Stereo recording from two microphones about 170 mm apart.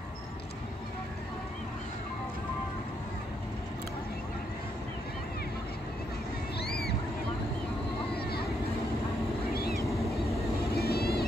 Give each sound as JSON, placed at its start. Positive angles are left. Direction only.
{"t": 6.6, "sound": "boat", "side_deg": 70}
{"t": 8.2, "sound": "vehicle", "side_deg": 65}
{"t": 9.6, "sound": "vehicle", "side_deg": 65}